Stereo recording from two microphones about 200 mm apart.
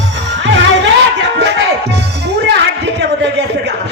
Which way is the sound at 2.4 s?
60° right (ahead or behind).